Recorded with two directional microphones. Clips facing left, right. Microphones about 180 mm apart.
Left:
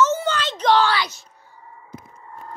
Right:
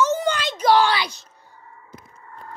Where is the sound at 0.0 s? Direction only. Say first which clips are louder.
Left 1 dB; 15° right (ahead or behind).